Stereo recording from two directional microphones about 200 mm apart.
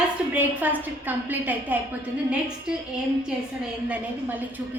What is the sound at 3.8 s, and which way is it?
Speech, 10° right (ahead or behind).